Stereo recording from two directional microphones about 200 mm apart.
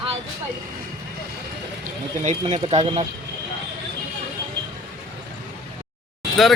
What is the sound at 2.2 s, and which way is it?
Speech, 30° right (ahead or behind).